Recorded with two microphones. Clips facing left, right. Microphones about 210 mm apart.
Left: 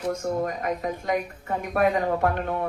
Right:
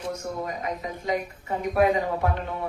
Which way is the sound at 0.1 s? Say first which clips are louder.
Left 5 dB; 50° left (ahead or behind).